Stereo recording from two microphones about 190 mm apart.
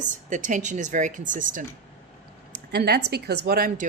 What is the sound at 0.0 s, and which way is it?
Speech, 40° right (ahead or behind).